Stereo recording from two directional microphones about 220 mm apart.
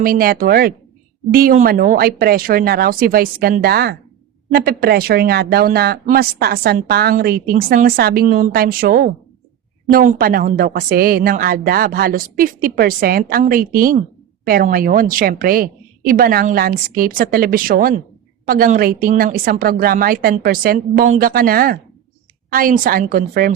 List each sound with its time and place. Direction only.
0.0 s a woman's voice: 40° right (ahead or behind)